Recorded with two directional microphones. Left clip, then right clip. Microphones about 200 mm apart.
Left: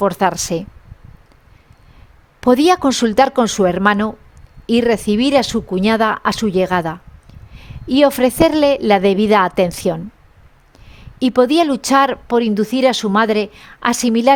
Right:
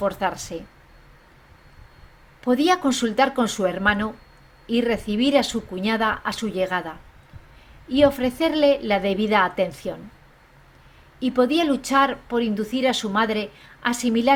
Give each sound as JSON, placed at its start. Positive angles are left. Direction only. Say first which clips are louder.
{"t": 0.0, "sound": "speech", "louder": "left 8 dB", "side_deg": 50}
{"t": 2.4, "sound": "speech", "louder": "left 7 dB", "side_deg": 55}
{"t": 11.2, "sound": "speech", "louder": "left 7 dB", "side_deg": 50}